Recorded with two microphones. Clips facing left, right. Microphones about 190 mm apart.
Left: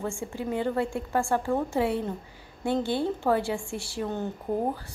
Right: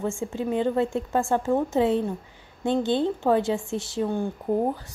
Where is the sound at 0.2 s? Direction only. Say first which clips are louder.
Right 4 dB; 20° right (ahead or behind).